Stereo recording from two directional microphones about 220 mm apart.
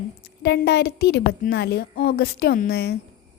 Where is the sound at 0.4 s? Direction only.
50° left (ahead or behind).